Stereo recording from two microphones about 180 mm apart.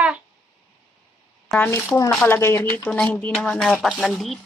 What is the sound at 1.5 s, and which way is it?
A woman's voice, 10° left (ahead or behind).